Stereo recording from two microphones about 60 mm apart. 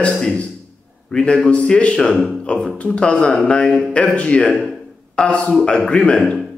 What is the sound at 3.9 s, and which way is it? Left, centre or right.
Speech, centre.